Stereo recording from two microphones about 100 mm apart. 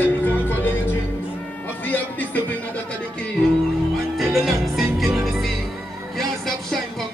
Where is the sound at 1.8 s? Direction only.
20° left (ahead or behind).